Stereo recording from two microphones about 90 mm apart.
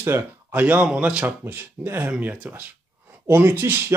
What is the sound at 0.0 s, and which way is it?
Speech, 25° right (ahead or behind).